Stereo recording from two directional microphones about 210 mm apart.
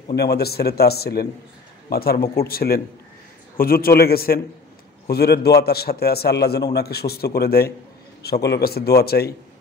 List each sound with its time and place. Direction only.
0.1 s a man's voice: 50° left (ahead or behind)